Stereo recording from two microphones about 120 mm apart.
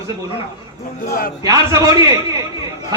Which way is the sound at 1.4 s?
25° right (ahead or behind).